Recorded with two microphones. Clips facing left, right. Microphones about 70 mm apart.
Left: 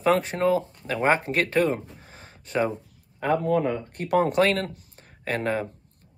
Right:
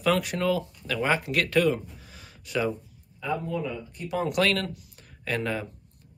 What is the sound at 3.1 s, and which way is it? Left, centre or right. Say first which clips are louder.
Speech: left 7 dB; left.